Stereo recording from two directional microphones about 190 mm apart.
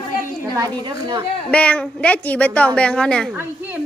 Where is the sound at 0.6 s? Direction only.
25° right (ahead or behind).